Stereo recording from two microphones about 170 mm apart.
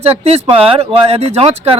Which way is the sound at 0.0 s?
35° right (ahead or behind).